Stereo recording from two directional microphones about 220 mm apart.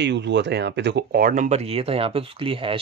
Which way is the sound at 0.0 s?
50° right (ahead or behind).